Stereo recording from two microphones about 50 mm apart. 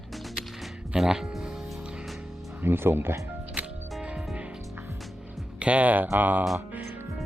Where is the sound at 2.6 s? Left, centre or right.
Right.